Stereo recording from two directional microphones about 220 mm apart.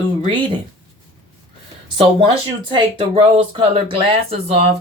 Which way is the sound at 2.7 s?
25° right (ahead or behind).